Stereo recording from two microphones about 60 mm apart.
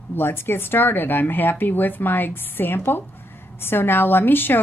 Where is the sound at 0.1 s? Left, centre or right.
Left.